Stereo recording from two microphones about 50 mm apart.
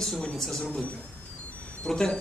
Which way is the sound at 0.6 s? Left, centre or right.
Left.